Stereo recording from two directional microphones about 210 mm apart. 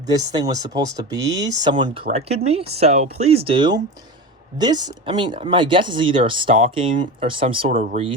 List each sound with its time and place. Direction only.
0.1 s speech: 15° right (ahead or behind)